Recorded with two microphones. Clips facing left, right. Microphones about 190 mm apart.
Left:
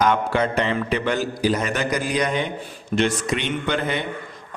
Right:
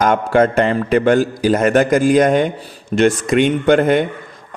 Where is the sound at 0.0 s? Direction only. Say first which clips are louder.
Right 6 dB; 45° right (ahead or behind).